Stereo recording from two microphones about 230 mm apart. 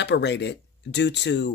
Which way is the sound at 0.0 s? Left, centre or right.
Left.